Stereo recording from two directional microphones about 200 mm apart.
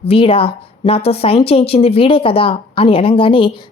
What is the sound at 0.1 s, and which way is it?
A woman's voice, 30° left (ahead or behind).